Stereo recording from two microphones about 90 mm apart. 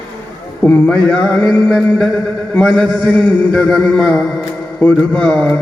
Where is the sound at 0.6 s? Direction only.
20° left (ahead or behind).